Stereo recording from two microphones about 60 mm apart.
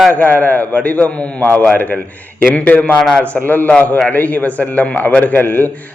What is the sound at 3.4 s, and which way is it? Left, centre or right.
A man's voice, left.